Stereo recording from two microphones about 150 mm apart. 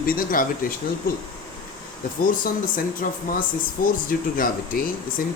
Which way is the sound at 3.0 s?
65° left (ahead or behind).